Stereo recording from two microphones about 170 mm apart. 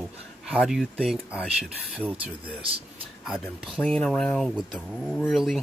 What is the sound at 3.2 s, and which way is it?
Speech, centre (ahead or behind).